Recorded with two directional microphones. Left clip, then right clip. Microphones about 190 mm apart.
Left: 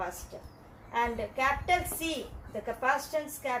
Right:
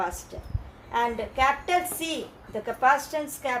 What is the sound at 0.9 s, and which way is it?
A woman's voice, 50° right (ahead or behind).